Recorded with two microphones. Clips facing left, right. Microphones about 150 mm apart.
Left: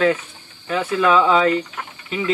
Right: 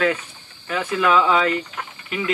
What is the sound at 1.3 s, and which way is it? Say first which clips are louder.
Speech: left 3 dB; 30° left (ahead or behind).